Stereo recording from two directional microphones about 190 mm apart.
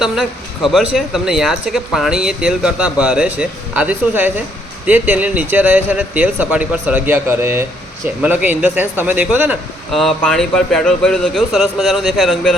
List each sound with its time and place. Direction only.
0.0 s a man's voice: centre (ahead or behind)